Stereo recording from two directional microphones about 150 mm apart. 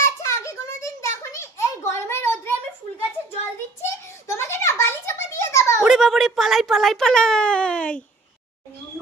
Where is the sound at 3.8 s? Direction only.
15° left (ahead or behind).